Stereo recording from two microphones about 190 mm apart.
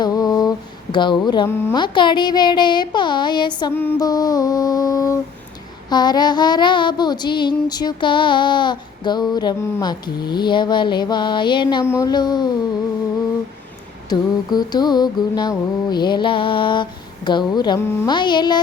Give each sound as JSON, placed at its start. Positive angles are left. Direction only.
{"t": 0.0, "sound": "a sound", "side_deg": 20}
{"t": 1.8, "sound": "child singing", "side_deg": 25}
{"t": 14.1, "sound": "child singing", "side_deg": 20}